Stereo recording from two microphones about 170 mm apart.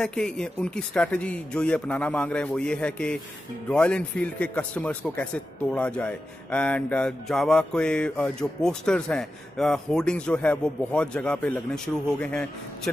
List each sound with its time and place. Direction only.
0.0 s a man's voice: 5° left (ahead or behind)